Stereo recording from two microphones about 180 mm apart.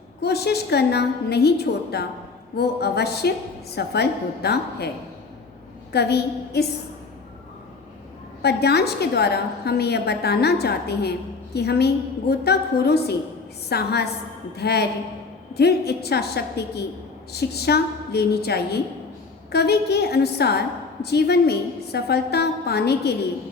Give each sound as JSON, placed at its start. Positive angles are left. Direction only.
{"t": 0.2, "sound": "a woman's voice", "side_deg": 65}
{"t": 5.9, "sound": "a woman's voice", "side_deg": 65}
{"t": 8.4, "sound": "a woman's voice", "side_deg": 65}